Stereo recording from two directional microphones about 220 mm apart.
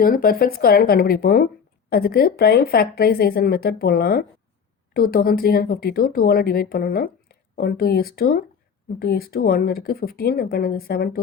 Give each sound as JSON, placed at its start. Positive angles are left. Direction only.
{"t": 0.0, "sound": "speech", "side_deg": 40}